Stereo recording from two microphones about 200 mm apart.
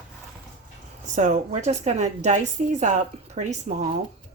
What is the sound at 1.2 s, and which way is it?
A woman's voice, 35° right (ahead or behind).